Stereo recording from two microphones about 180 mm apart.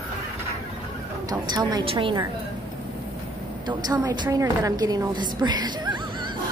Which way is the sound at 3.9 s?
20° right (ahead or behind).